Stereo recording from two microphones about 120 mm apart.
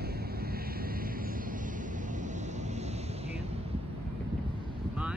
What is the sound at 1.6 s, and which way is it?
Vehicle, 90° right.